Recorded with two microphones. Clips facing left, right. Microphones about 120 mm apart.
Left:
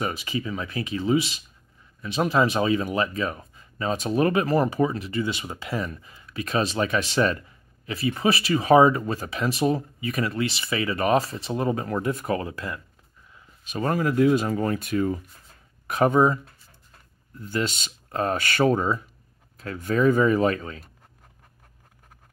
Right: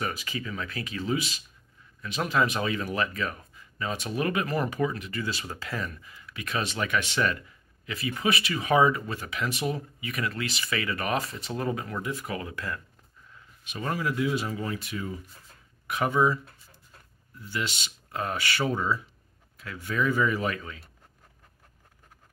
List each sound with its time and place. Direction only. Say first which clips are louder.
0.0 s speech: left 5 dB; 25° left (ahead or behind)
13.7 s speech: left 6 dB; 40° left (ahead or behind)
17.4 s speech: left 6 dB; 45° left (ahead or behind)